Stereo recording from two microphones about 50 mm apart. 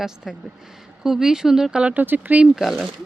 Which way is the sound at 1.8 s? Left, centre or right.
Right.